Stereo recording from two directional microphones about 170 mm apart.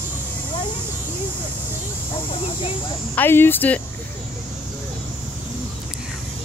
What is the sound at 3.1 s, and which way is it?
Speech, 10° left (ahead or behind).